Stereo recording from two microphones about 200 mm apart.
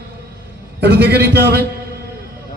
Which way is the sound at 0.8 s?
55° right (ahead or behind).